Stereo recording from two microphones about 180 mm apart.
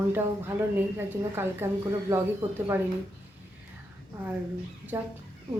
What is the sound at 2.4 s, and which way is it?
Speech, 25° right (ahead or behind).